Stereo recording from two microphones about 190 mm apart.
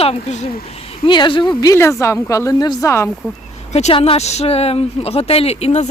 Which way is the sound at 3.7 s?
35° left (ahead or behind).